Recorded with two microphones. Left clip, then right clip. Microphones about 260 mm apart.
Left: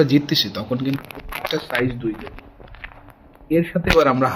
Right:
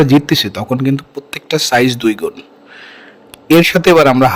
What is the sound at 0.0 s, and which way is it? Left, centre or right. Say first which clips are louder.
A man's voice: right 6 dB; right.